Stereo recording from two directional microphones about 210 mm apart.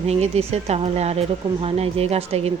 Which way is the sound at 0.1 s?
30° right (ahead or behind).